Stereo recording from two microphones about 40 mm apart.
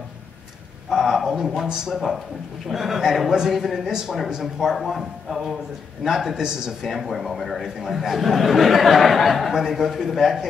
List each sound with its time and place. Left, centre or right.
0.8 s a sound: centre
2.7 s a man's voice: centre
3.9 s a man's voice: centre
6.9 s a man's voice: centre